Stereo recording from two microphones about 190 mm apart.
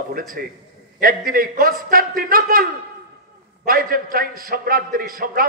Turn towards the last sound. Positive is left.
turn(degrees=-50)  # may be behind; listen again after turning